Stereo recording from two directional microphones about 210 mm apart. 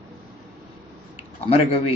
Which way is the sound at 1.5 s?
25° left (ahead or behind).